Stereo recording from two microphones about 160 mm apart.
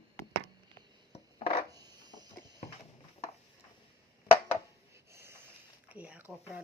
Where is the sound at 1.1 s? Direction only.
40° left (ahead or behind).